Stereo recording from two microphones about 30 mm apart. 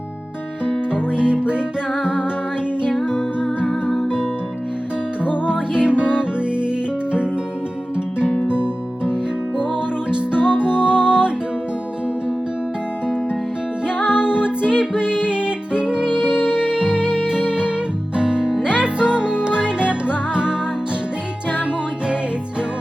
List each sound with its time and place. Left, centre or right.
0.9 s music: right
5.5 s music: right
8.4 s music: right
13.8 s music: right
16.6 s music: right